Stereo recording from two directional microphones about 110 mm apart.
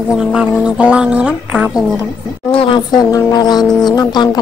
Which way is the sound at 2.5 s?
55° left (ahead or behind).